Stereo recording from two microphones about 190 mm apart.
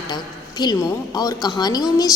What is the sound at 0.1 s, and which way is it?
A woman's voice, 20° left (ahead or behind).